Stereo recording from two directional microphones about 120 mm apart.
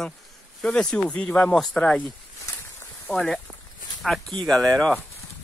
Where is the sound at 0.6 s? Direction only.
5° left (ahead or behind).